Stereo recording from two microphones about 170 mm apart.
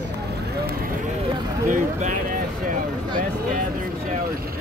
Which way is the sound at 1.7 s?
50° right (ahead or behind).